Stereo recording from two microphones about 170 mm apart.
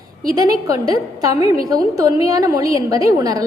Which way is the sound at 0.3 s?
20° right (ahead or behind).